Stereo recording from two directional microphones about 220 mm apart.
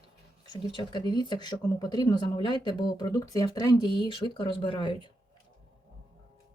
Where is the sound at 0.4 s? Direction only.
20° left (ahead or behind).